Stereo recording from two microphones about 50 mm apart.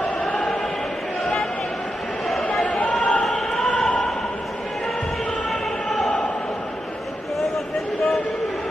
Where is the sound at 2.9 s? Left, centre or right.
Left.